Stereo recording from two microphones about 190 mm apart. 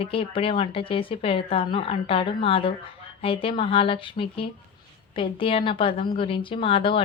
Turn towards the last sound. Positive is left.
turn(degrees=30)  # may be behind; listen again after turning